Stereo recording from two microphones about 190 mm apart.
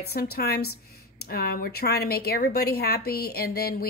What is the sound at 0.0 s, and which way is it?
Speech, 55° left (ahead or behind).